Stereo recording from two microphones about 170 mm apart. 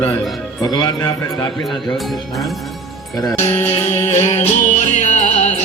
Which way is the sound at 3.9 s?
40° left (ahead or behind).